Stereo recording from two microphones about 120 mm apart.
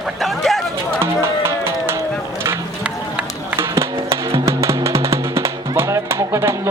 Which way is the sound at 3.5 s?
25° right (ahead or behind).